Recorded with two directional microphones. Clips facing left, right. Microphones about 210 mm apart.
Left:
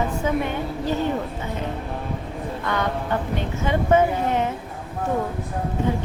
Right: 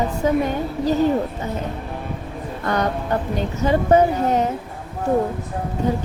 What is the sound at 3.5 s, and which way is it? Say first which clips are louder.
Speech: right 3 dB; 40° right (ahead or behind).